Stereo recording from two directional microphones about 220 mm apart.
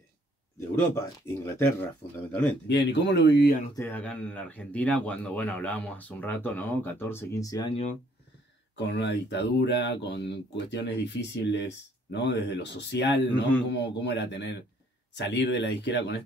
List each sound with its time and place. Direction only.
0.9 s speech: 10° left (ahead or behind)
2.7 s speech: 50° left (ahead or behind)
3.7 s speech: 10° left (ahead or behind)
7.7 s speech: 30° left (ahead or behind)
8.7 s speech: 55° left (ahead or behind)